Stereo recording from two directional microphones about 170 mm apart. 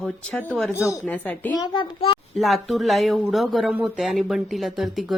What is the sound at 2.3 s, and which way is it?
Speech, centre (ahead or behind).